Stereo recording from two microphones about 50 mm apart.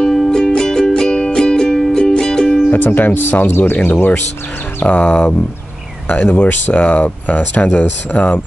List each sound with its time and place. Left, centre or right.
0.0 s music: centre
2.7 s speech: left